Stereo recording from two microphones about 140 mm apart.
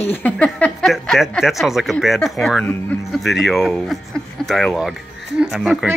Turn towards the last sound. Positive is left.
turn(degrees=0)  # may be behind; listen again after turning